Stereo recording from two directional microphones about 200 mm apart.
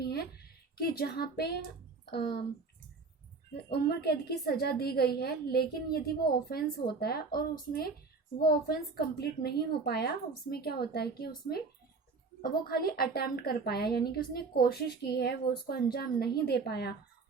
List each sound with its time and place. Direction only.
0.0 s a sound: 50° left (ahead or behind)
2.0 s a woman's voice: 55° left (ahead or behind)
3.5 s a woman's voice: 55° left (ahead or behind)